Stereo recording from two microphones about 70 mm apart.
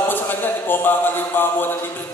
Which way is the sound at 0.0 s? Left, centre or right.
Left.